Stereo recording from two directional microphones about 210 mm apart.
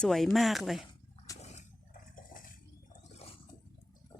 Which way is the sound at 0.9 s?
15° left (ahead or behind).